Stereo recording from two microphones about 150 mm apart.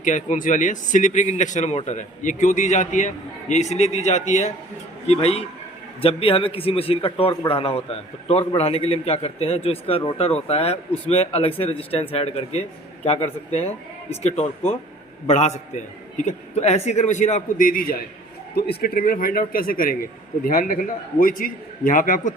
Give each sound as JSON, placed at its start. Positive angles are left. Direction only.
{"t": 0.0, "sound": "a man's voice", "side_deg": 55}
{"t": 18.5, "sound": "a man's voice", "side_deg": 90}